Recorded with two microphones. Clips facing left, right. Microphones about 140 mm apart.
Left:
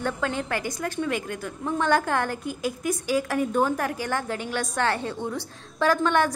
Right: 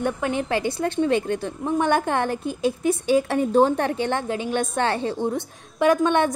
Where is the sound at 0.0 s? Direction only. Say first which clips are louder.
Right 3 dB; 20° right (ahead or behind).